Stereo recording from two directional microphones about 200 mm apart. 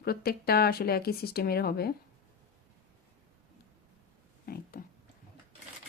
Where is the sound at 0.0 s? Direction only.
50° left (ahead or behind).